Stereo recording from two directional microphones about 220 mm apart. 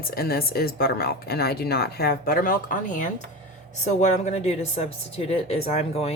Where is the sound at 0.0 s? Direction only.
45° left (ahead or behind).